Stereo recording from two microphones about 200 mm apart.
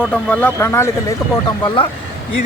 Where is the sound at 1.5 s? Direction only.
25° left (ahead or behind).